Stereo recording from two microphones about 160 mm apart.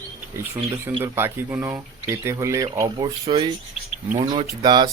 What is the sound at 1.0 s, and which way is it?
Speech, 15° right (ahead or behind).